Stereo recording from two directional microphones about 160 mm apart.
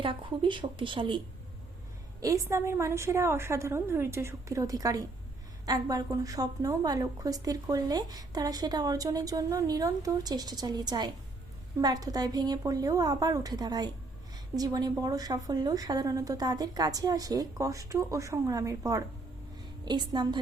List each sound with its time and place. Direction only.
0.0 s speech: 30° right (ahead or behind)
2.2 s a woman's voice: 20° right (ahead or behind)